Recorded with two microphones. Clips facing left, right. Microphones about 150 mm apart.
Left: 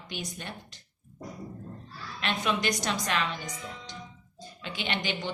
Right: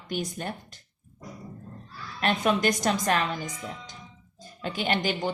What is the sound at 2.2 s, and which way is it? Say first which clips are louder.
A woman's voice: right 5 dB; 45° right (ahead or behind).